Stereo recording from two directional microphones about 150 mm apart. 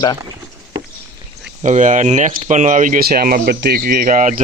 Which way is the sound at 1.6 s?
55° right (ahead or behind).